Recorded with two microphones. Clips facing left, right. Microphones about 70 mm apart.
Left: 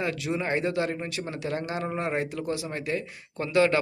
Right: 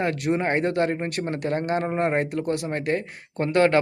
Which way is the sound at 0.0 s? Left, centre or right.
Right.